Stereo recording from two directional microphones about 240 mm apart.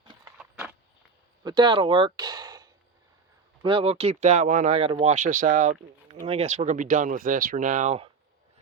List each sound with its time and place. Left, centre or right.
1.5 s speech: centre